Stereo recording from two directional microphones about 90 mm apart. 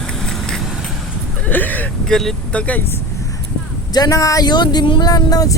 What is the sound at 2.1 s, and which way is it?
Speech, 5° left (ahead or behind).